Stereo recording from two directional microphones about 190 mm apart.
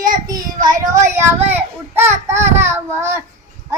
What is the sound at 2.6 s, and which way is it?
Child singing, 15° right (ahead or behind).